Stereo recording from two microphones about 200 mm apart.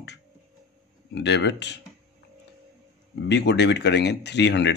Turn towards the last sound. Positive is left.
turn(degrees=60)  # may be behind; listen again after turning